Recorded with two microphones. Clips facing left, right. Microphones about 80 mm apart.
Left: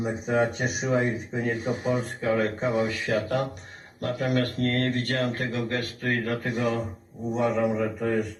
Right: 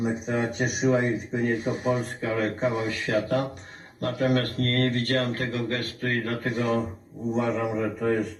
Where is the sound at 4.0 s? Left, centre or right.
Right.